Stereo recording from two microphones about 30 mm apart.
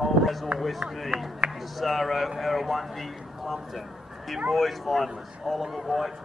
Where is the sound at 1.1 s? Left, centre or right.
Right.